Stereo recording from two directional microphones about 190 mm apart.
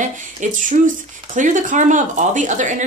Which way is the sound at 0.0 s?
40° right (ahead or behind).